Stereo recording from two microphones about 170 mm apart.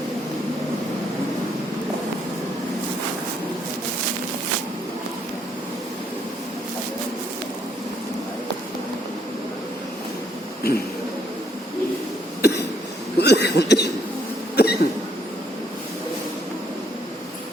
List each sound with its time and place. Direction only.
12.4 s cough: 80° left
13.1 s a sound: 75° left (ahead or behind)
14.5 s hiccup: 70° left (ahead or behind)